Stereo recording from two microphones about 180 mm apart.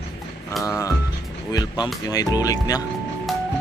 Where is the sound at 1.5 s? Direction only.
20° left (ahead or behind).